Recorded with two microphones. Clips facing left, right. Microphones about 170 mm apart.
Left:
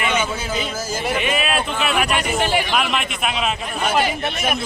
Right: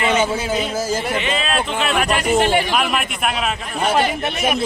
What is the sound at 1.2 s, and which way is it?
A man's voice, 15° left (ahead or behind).